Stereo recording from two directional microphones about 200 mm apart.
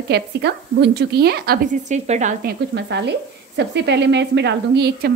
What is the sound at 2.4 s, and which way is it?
A woman's voice, 60° right (ahead or behind).